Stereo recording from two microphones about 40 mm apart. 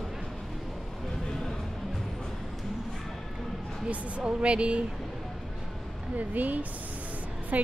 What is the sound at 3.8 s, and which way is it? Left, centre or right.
Speech, right.